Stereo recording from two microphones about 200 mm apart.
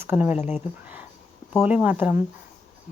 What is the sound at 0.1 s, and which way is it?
Speech, 10° right (ahead or behind).